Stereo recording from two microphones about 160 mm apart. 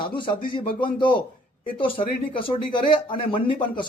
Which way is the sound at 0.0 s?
30° left (ahead or behind).